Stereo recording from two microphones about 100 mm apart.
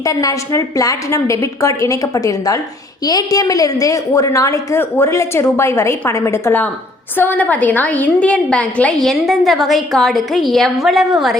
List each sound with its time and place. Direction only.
0.0 s a woman's voice: 35° left (ahead or behind); by 8.9 s 15° left (ahead or behind)
9.0 s a woman's voice: centre (ahead or behind)